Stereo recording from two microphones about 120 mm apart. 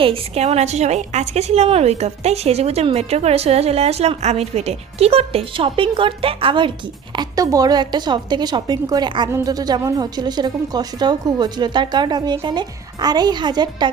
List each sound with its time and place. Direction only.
0.0 s a woman's voice: 55° right (ahead or behind)
7.2 s a woman's voice: 30° right (ahead or behind)